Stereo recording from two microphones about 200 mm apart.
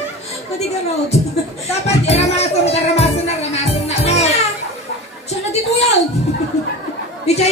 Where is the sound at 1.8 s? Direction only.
30° left (ahead or behind).